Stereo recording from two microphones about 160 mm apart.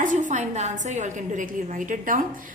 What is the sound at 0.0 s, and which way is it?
A woman's voice, 50° right (ahead or behind).